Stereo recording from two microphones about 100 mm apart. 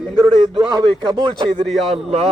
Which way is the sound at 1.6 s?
Centre (ahead or behind).